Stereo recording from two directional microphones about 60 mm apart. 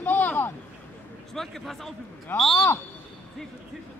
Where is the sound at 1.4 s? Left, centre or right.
Centre.